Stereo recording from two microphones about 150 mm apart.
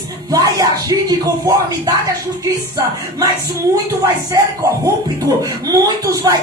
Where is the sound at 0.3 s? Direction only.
25° right (ahead or behind).